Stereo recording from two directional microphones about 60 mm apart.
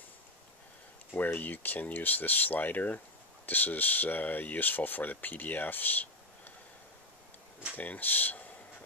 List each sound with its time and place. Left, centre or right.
1.1 s speech: left
7.7 s speech: left